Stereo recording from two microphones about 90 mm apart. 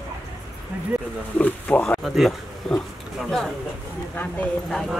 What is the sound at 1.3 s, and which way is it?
Speech, 15° left (ahead or behind).